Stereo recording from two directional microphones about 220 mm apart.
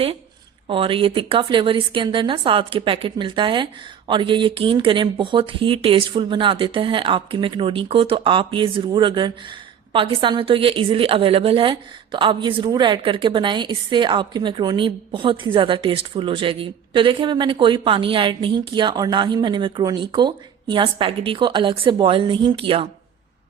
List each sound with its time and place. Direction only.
0.7 s speech: 25° right (ahead or behind)